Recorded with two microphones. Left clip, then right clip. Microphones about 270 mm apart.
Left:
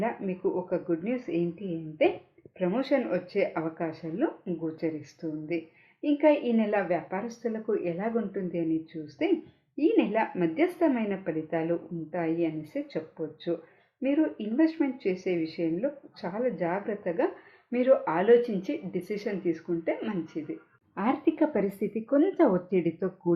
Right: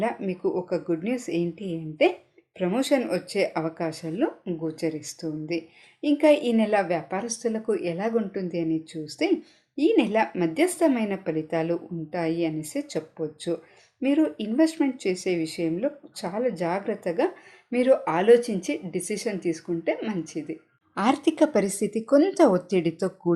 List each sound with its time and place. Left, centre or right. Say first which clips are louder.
0.0 s a woman's voice: right 3 dB; right